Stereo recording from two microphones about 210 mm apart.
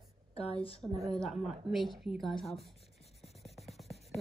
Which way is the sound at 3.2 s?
Centre (ahead or behind).